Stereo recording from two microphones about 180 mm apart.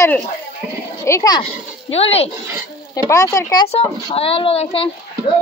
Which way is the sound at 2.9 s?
20° left (ahead or behind).